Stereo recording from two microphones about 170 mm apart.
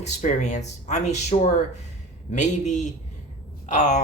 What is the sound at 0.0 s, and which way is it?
Speech, 45° left (ahead or behind).